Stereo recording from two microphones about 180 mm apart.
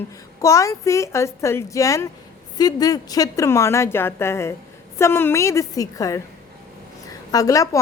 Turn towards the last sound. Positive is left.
turn(degrees=20)  # may be behind; listen again after turning